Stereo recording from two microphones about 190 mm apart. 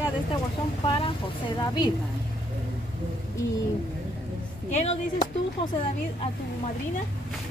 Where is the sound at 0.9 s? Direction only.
25° left (ahead or behind).